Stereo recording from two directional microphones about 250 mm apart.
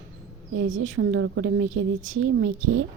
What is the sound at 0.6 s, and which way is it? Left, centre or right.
A woman's voice, right.